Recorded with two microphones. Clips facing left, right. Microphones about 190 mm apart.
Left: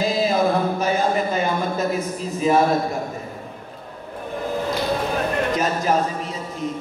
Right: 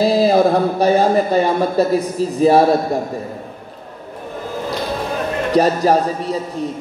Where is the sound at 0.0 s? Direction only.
35° right (ahead or behind).